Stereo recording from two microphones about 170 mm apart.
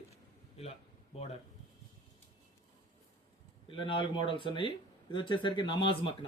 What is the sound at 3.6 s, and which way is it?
Speech, 30° left (ahead or behind).